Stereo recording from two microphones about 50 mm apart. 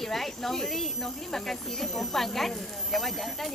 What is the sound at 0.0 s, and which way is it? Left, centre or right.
Speech, centre.